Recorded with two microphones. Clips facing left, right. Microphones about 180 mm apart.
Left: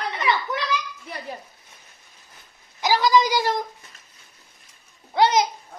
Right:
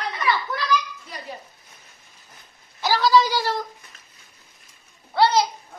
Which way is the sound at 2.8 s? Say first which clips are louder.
Even; 15° left (ahead or behind).